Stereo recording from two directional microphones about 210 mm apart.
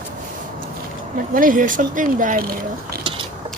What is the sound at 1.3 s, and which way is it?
Speech, 40° right (ahead or behind).